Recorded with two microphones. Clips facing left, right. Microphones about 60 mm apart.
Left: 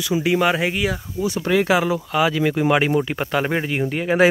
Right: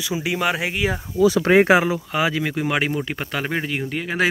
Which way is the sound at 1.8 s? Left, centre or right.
Centre.